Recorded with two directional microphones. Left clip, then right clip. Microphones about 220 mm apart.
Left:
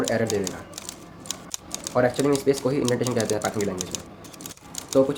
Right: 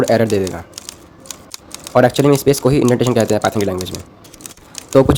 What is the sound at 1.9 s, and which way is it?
Speech, 50° right (ahead or behind).